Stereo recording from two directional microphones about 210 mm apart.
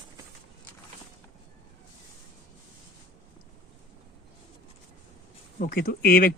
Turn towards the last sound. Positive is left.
turn(degrees=45)  # may be behind; listen again after turning